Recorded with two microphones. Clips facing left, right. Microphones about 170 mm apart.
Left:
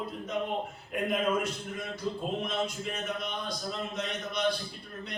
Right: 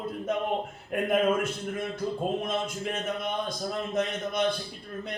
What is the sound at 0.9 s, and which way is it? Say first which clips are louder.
Speech: right 4 dB; 55° right (ahead or behind).